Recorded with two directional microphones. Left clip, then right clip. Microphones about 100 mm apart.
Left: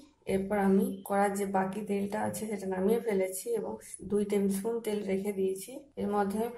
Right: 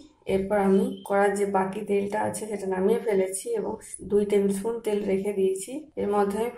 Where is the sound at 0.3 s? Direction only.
10° right (ahead or behind).